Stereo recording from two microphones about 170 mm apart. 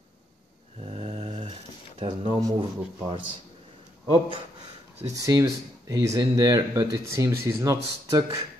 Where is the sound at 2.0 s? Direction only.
30° right (ahead or behind).